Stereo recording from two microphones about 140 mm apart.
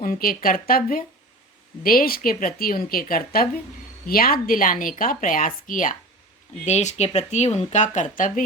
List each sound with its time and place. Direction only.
0.0 s a woman's voice: 90° left
1.8 s a woman's voice: 90° left; by 6.0 s 70° left (ahead or behind)
6.7 s speech: 55° left (ahead or behind); by 8.4 s 70° left (ahead or behind)